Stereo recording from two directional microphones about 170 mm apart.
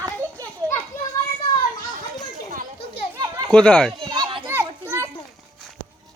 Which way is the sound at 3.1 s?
20° right (ahead or behind).